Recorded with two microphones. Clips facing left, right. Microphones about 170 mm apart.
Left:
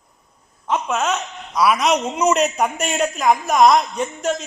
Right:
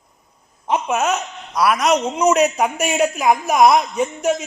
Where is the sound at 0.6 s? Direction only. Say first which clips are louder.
Right 2 dB; 15° right (ahead or behind).